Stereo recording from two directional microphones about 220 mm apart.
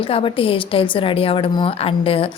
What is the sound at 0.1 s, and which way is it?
A woman's voice, 25° left (ahead or behind).